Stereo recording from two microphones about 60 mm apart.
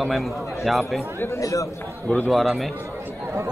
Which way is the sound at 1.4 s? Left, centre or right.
Left.